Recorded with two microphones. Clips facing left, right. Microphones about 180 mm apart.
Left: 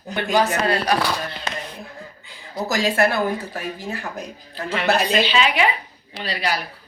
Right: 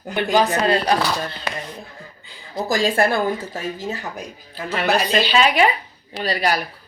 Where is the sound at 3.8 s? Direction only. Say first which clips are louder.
Right 1 dB; 15° right (ahead or behind).